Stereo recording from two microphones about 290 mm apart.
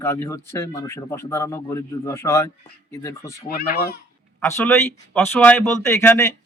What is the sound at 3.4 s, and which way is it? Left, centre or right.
Speech, left.